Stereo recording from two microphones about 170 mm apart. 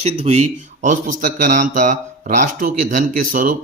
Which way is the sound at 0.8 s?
50° right (ahead or behind).